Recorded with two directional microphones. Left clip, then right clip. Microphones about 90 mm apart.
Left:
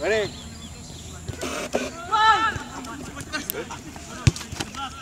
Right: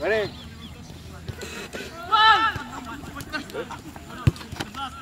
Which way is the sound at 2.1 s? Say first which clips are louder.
Right 1 dB; 40° right (ahead or behind).